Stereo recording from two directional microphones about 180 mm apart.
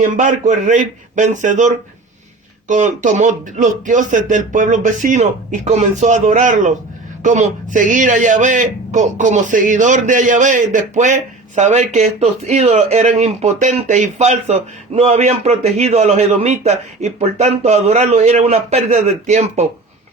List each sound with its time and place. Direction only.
0.0 s a man's voice: 45° right (ahead or behind)